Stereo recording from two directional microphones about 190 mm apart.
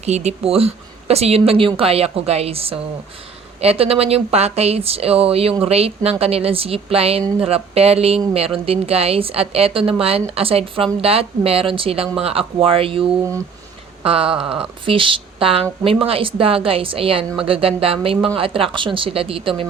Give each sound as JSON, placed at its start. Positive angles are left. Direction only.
{"t": 0.0, "sound": "a woman's voice", "side_deg": -35}